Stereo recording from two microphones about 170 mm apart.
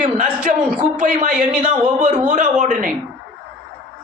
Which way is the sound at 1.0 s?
50° right (ahead or behind).